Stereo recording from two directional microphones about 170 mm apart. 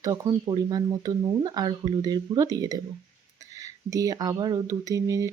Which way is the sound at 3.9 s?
20° right (ahead or behind).